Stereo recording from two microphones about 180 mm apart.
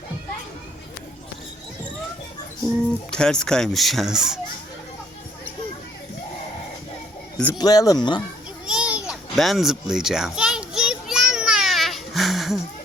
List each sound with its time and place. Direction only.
2.6 s speech: 5° left (ahead or behind)
7.3 s speech: 5° left (ahead or behind)
7.6 s speech: 20° left (ahead or behind)
8.6 s children playing: 5° right (ahead or behind)